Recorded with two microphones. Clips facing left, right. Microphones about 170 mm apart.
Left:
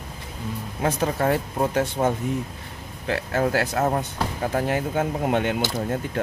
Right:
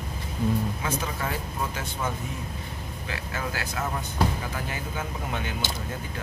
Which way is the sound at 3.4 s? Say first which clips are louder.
Left 10 dB; 40° left (ahead or behind).